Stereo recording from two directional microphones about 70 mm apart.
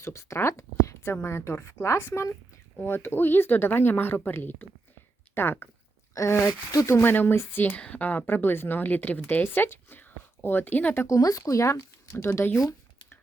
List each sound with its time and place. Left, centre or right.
0.0 s speech: left
1.0 s speech: left
6.1 s speech: left
6.9 s speech: left
7.7 s speech: centre
11.0 s speech: left